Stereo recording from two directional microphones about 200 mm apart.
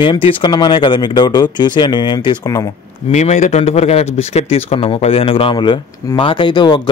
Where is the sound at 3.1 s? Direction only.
35° left (ahead or behind).